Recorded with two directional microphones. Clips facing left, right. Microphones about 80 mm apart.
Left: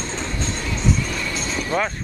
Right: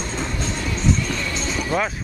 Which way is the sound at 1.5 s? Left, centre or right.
Centre.